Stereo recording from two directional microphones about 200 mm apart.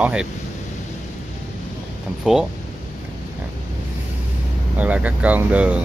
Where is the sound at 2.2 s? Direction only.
Centre (ahead or behind).